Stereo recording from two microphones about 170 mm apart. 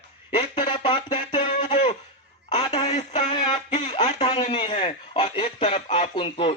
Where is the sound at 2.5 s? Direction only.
40° left (ahead or behind).